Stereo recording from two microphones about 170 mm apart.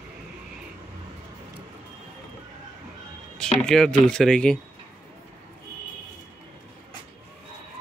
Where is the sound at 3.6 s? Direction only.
5° left (ahead or behind).